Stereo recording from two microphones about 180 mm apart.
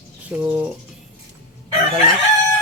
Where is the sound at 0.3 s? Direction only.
5° right (ahead or behind).